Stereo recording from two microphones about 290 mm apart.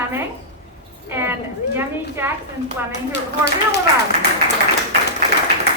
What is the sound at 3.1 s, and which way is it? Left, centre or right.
Speech, left.